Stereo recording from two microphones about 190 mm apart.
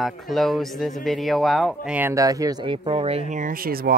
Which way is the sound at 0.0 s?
Centre (ahead or behind).